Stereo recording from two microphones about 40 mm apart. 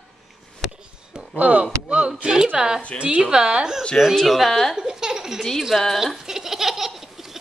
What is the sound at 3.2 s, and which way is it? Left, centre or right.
Speech, centre.